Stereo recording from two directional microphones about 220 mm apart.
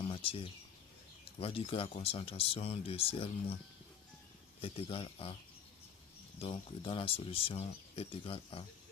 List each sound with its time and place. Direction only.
0.0 s a sound: 25° left (ahead or behind)
1.2 s speech: 25° left (ahead or behind)
4.6 s speech: 25° left (ahead or behind)
6.4 s speech: 25° left (ahead or behind)